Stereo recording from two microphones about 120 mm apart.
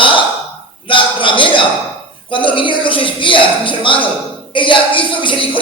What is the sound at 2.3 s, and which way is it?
Speech, 45° left (ahead or behind).